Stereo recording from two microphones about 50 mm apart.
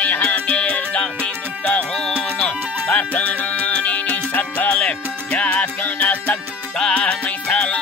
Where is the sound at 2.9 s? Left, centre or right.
Left.